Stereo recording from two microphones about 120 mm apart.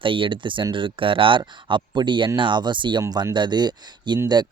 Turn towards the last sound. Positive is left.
turn(degrees=-40)  # may be behind; listen again after turning